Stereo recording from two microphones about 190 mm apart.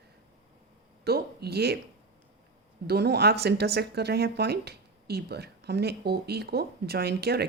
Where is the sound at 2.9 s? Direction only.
60° right (ahead or behind).